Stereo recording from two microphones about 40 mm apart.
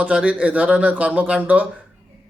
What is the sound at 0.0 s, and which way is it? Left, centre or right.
Speech, right.